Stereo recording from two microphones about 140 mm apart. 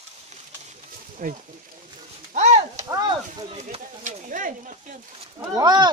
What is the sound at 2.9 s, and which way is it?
Speech, 25° right (ahead or behind).